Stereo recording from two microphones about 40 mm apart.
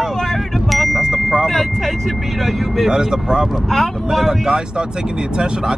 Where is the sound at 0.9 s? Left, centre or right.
Centre.